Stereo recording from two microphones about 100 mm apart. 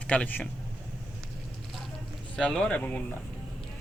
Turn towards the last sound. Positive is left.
turn(degrees=15)  # may be behind; listen again after turning